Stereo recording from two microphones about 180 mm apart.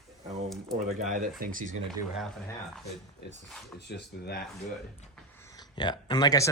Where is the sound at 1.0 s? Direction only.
50° right (ahead or behind).